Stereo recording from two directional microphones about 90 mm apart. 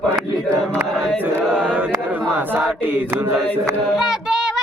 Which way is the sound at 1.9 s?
20° right (ahead or behind).